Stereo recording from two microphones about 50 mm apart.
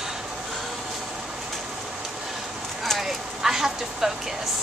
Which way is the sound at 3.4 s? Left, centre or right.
Centre.